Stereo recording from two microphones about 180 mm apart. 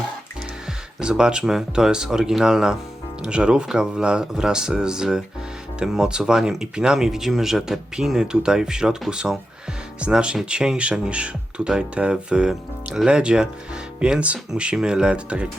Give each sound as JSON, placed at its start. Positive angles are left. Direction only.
{"t": 0.9, "sound": "speech", "side_deg": -5}